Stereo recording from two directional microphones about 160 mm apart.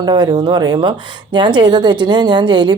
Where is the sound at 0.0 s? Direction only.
25° right (ahead or behind).